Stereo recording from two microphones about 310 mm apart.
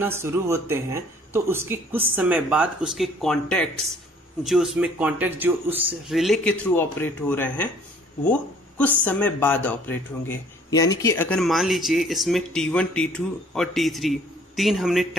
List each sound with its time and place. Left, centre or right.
0.0 s speech: centre